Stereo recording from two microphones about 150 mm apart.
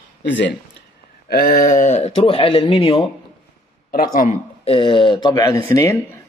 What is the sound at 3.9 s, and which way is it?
Speech, 65° left (ahead or behind).